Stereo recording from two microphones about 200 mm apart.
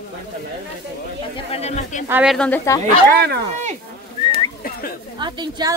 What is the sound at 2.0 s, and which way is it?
Speech, 5° right (ahead or behind).